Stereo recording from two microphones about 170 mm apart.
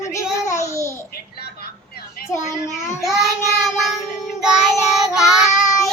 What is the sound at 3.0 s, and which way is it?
Child singing, centre (ahead or behind).